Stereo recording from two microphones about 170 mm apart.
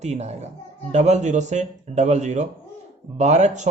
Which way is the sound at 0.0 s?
40° right (ahead or behind).